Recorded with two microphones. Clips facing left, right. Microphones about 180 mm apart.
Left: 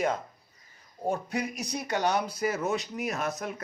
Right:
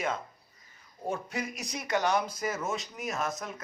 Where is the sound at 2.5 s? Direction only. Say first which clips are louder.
Left 4 dB; 65° left (ahead or behind).